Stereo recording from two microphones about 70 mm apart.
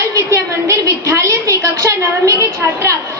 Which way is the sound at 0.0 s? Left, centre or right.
Right.